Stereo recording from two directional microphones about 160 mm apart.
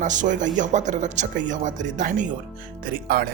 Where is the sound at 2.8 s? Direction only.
65° right (ahead or behind).